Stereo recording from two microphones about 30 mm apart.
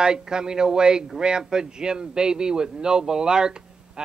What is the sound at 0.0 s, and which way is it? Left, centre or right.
Speech, right.